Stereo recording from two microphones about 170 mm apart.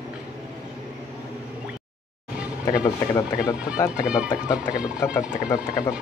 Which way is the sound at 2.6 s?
20° left (ahead or behind).